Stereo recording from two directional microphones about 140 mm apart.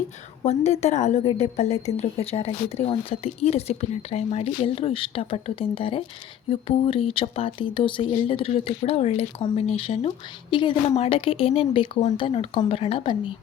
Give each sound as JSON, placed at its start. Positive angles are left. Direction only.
{"t": 0.4, "sound": "speech", "side_deg": 50}